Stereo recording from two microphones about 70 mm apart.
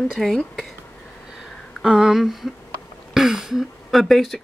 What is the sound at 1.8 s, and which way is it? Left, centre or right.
Speech, centre.